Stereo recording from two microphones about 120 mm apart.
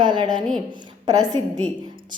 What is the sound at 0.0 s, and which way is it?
A woman's voice, 40° right (ahead or behind).